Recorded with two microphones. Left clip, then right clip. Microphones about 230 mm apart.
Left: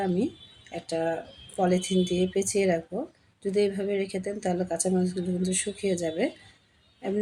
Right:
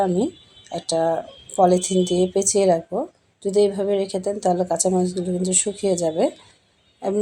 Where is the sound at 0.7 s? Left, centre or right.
Centre.